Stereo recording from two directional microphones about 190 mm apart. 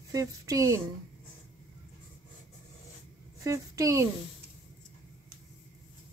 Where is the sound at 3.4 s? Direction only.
15° right (ahead or behind).